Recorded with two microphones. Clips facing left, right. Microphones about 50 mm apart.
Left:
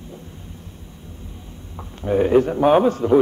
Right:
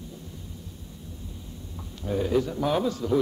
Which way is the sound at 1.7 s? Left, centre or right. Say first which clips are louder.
Left 9 dB; left.